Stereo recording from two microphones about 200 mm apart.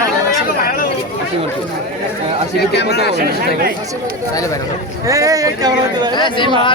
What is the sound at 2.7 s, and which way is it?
Speech, 55° left (ahead or behind).